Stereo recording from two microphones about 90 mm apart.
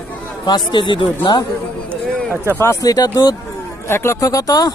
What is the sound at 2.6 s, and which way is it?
Speech, 30° left (ahead or behind).